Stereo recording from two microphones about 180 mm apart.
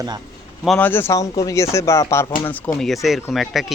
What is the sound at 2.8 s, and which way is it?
Speech, centre (ahead or behind).